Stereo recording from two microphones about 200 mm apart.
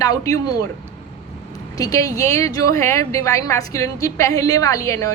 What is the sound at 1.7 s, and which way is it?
A woman's voice, 15° left (ahead or behind).